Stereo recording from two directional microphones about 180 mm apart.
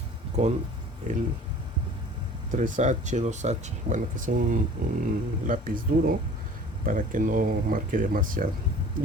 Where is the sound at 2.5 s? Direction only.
45° right (ahead or behind).